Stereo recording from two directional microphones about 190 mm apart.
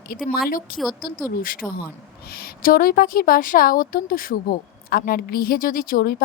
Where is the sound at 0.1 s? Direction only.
50° left (ahead or behind).